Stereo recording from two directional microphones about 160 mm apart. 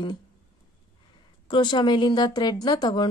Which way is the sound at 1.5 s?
30° left (ahead or behind).